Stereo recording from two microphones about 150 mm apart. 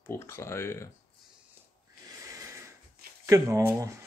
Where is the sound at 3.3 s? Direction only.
20° right (ahead or behind).